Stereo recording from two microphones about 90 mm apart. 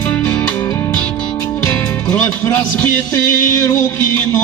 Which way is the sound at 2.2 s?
35° left (ahead or behind).